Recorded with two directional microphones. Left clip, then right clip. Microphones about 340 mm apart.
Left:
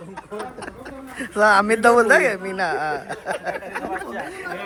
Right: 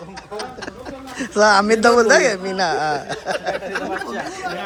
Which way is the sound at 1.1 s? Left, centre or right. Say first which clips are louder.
Right 2 dB; centre.